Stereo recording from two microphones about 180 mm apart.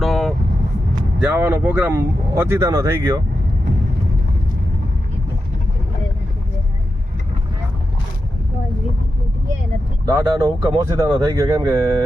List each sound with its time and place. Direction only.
0.0 s vehicle: centre (ahead or behind)
1.2 s speech: 10° right (ahead or behind)
10.1 s speech: 20° right (ahead or behind)